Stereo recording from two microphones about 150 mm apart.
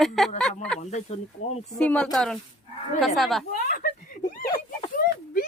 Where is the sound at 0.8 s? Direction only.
45° left (ahead or behind).